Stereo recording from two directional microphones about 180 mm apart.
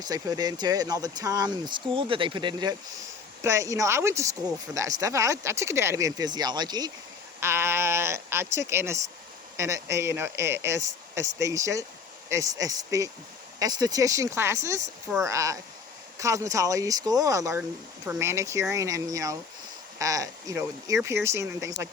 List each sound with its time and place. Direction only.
0.0 s speech: 20° right (ahead or behind)